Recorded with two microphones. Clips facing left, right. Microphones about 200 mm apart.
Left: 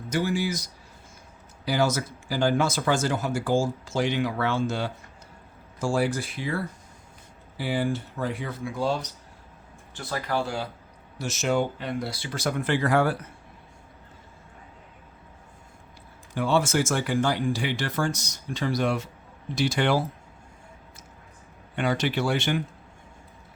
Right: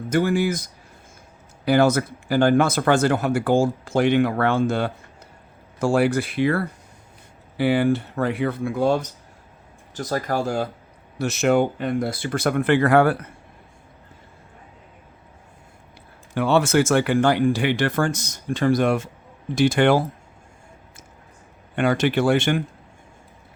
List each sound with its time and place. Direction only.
0.1 s speech: 55° right (ahead or behind)
9.9 s speech: 40° right (ahead or behind)
11.2 s speech: 60° right (ahead or behind)
16.3 s speech: 65° right (ahead or behind); by 20.1 s 50° right (ahead or behind)
21.8 s speech: 50° right (ahead or behind)